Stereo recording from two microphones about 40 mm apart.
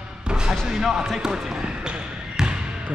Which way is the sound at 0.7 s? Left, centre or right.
Centre.